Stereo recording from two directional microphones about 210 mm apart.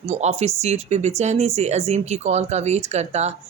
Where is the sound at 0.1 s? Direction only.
30° right (ahead or behind).